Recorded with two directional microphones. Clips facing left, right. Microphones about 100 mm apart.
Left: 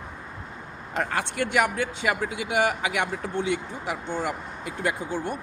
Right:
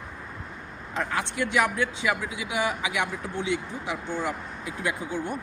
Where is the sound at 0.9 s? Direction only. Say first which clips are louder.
Left 1 dB; 60° left (ahead or behind).